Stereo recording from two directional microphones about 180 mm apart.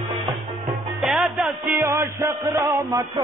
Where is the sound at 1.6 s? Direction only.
15° right (ahead or behind).